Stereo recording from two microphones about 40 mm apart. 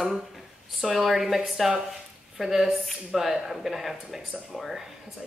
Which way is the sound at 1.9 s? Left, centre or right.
Centre.